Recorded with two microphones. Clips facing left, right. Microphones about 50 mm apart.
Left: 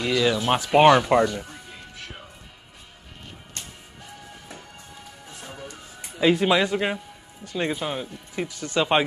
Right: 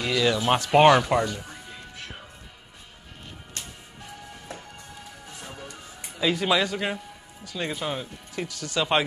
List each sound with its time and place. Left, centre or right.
0.0 s speech: centre
1.0 s speech: centre
1.4 s music: centre
5.3 s music: centre
6.1 s speech: left
7.8 s speech: centre
8.4 s speech: left